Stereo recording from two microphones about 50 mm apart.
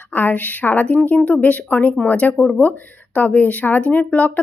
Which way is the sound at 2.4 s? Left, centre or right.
Centre.